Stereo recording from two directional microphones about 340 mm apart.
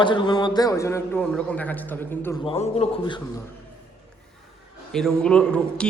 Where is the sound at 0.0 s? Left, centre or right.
Centre.